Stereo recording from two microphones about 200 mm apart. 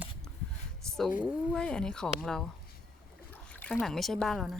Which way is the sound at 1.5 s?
5° left (ahead or behind).